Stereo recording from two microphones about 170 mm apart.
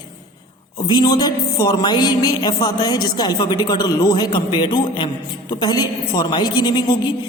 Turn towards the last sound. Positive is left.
turn(degrees=25)  # may be behind; listen again after turning